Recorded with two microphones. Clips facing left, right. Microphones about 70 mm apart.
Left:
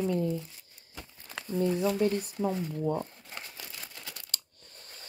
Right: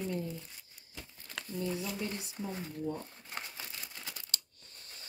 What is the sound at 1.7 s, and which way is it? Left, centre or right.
Speech, left.